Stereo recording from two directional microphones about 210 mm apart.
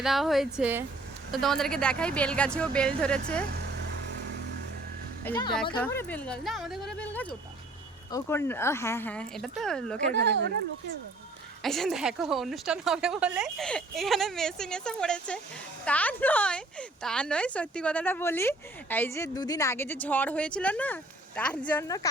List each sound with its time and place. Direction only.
0.0 s a woman's voice: centre (ahead or behind)
5.2 s a woman's voice: 15° left (ahead or behind)
10.1 s speech: 55° right (ahead or behind)
11.6 s a woman's voice: centre (ahead or behind)